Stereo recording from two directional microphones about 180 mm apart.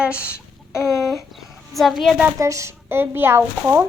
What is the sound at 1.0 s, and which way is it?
Speech, centre (ahead or behind).